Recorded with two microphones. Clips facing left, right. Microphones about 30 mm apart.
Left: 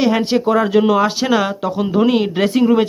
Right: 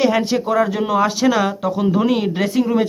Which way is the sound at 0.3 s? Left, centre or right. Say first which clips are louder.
Left 2 dB; left.